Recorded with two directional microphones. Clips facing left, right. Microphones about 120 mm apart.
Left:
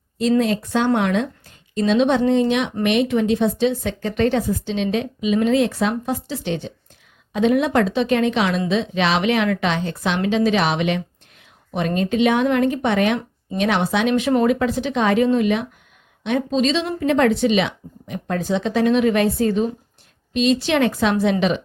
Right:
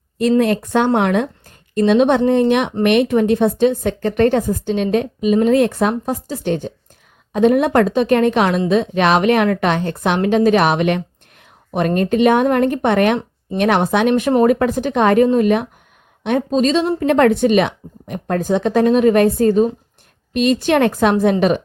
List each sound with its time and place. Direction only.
0.2 s a woman's voice: 55° right (ahead or behind)
17.0 s speech: 55° right (ahead or behind)